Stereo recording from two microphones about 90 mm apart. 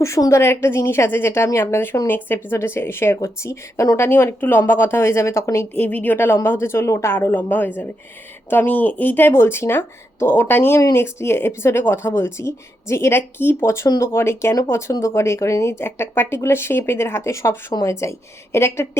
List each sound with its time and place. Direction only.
0.0 s speech: 35° left (ahead or behind)
8.4 s speech: 20° left (ahead or behind)